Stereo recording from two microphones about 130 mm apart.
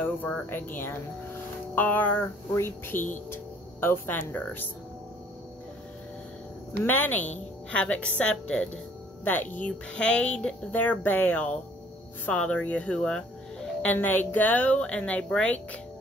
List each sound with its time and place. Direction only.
0.0 s speech: 15° left (ahead or behind)
6.8 s speech: 15° left (ahead or behind)